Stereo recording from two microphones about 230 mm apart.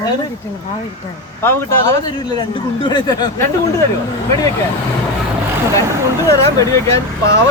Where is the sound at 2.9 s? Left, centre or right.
Centre.